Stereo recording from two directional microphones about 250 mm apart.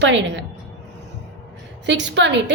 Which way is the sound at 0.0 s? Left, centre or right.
Right.